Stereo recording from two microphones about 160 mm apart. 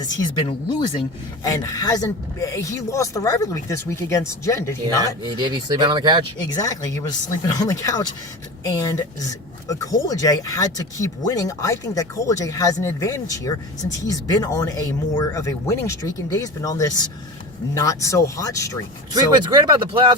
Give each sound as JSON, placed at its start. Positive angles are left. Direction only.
{"t": 0.0, "sound": "speech", "side_deg": 30}
{"t": 5.4, "sound": "speech", "side_deg": -25}
{"t": 6.5, "sound": "speech", "side_deg": 20}
{"t": 19.1, "sound": "speech", "side_deg": -25}